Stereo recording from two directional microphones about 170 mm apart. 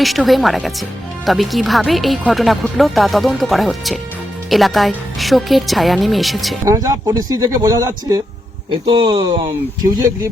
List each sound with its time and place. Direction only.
0.0 s speech: centre (ahead or behind)
6.7 s speech: 20° right (ahead or behind)